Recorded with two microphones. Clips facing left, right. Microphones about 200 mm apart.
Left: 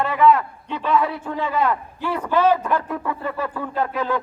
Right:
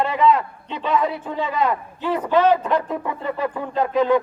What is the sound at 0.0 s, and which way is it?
A man's voice, 20° right (ahead or behind).